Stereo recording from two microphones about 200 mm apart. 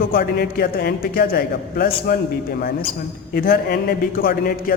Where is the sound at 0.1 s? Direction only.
50° left (ahead or behind).